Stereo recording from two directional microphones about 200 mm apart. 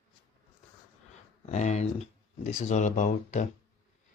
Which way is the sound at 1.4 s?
35° left (ahead or behind).